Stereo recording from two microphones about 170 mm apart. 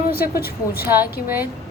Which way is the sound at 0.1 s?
65° left (ahead or behind).